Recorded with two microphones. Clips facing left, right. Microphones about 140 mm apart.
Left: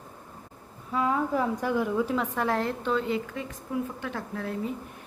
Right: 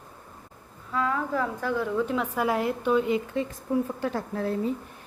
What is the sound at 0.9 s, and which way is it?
A woman's voice, 20° left (ahead or behind).